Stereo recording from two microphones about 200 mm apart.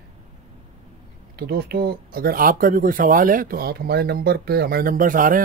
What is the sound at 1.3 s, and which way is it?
Speech, 55° right (ahead or behind).